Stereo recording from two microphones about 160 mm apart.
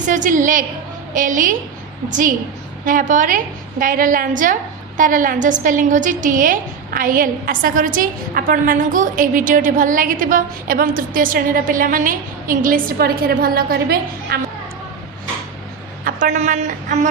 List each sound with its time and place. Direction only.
0.1 s a woman's voice: 50° right (ahead or behind); by 14.3 s 75° right (ahead or behind)
16.0 s a woman's voice: 55° right (ahead or behind)